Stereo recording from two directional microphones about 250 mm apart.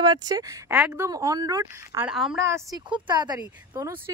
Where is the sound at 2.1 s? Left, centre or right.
Centre.